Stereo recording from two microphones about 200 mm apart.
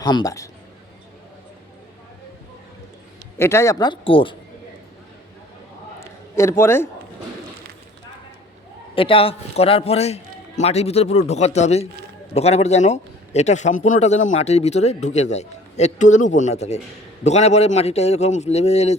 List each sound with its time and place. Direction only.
0.0 s a man's voice: 20° left (ahead or behind)
3.3 s a man's voice: 15° left (ahead or behind)
6.0 s a sound: 15° left (ahead or behind)
9.0 s a man's voice: 25° left (ahead or behind)